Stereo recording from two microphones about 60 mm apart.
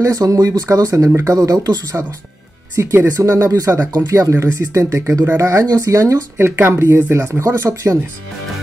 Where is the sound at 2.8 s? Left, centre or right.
Right.